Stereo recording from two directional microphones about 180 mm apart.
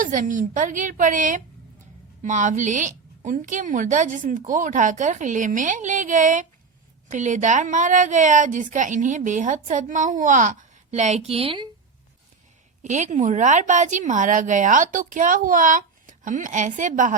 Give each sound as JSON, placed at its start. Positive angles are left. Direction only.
{"t": 0.0, "sound": "a woman's voice", "side_deg": -45}
{"t": 12.8, "sound": "a woman's voice", "side_deg": -40}